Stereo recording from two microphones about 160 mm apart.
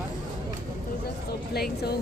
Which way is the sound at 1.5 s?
80° left.